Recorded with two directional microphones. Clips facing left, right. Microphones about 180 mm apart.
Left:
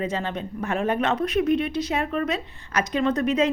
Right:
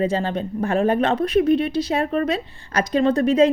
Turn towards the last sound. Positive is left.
turn(degrees=-30)  # may be behind; listen again after turning